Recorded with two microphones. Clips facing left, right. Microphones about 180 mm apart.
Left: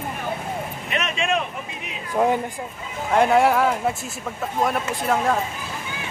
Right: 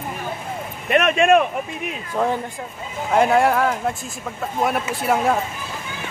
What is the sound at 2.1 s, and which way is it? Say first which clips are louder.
Speech: left 2 dB; 15° left (ahead or behind).